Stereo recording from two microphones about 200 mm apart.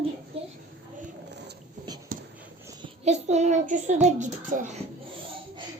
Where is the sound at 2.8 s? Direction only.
35° right (ahead or behind).